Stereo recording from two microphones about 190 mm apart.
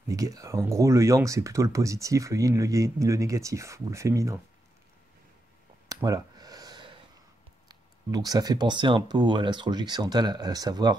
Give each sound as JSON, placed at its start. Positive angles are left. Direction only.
{"t": 0.1, "sound": "speech", "side_deg": -20}
{"t": 5.9, "sound": "a sound", "side_deg": -20}
{"t": 7.6, "sound": "speech", "side_deg": -20}